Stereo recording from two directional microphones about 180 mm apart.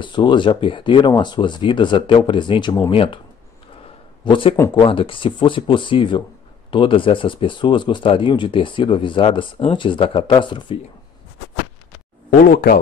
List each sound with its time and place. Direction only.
0.0 s speech: 25° left (ahead or behind)
4.2 s a man's voice: 30° left (ahead or behind)
12.3 s speech: 55° left (ahead or behind)